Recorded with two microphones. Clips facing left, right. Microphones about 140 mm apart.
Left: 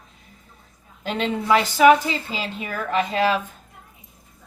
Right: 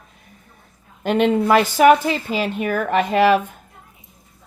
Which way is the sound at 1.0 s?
55° right (ahead or behind).